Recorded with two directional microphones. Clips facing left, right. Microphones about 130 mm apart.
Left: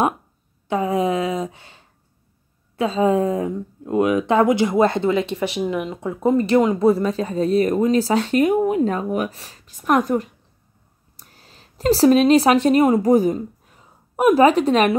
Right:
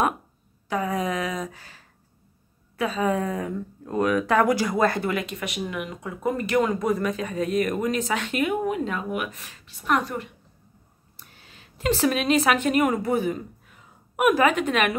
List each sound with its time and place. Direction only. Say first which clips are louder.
0.7 s speech: left 6 dB; 25° left (ahead or behind)